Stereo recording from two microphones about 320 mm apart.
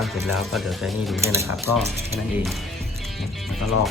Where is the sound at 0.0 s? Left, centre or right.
Centre.